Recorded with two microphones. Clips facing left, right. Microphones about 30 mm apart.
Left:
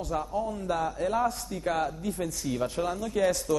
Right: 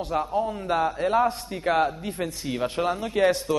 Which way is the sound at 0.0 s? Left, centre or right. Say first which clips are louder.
Right 5 dB; right.